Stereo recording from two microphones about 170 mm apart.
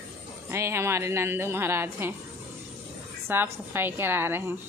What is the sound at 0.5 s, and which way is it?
A woman's voice, 15° right (ahead or behind).